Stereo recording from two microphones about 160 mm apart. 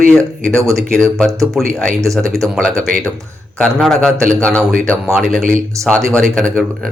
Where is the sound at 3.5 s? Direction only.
5° left (ahead or behind).